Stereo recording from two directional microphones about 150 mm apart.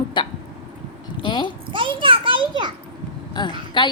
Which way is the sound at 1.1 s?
30° left (ahead or behind).